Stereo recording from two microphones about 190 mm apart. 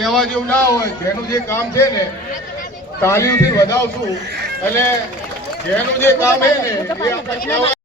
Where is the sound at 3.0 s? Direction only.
15° left (ahead or behind).